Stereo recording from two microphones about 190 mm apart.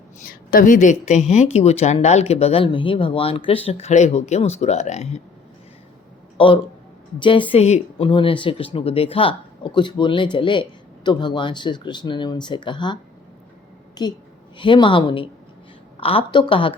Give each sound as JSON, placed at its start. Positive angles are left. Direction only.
{"t": 0.2, "sound": "a woman's voice", "side_deg": 45}
{"t": 6.3, "sound": "speech", "side_deg": 25}